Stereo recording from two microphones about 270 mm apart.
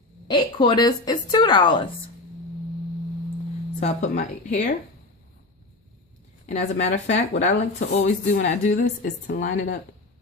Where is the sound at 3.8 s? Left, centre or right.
Left.